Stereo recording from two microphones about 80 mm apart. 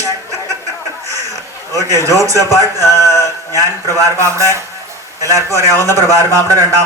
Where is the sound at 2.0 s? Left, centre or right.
Right.